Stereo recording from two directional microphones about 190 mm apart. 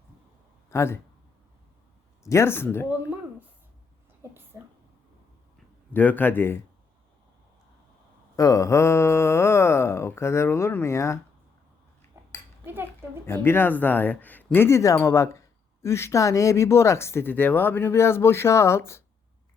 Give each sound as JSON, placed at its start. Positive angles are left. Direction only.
{"t": 0.7, "sound": "speech", "side_deg": 15}
{"t": 2.2, "sound": "speech", "side_deg": 15}
{"t": 5.9, "sound": "speech", "side_deg": 10}
{"t": 8.4, "sound": "speech", "side_deg": 15}
{"t": 12.1, "sound": "cutlery", "side_deg": -10}
{"t": 13.2, "sound": "speech", "side_deg": 15}